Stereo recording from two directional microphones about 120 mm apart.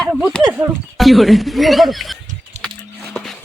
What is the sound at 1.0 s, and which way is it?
Speech, centre (ahead or behind).